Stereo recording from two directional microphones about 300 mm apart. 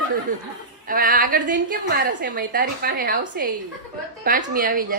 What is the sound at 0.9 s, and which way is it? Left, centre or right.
A woman's voice, right.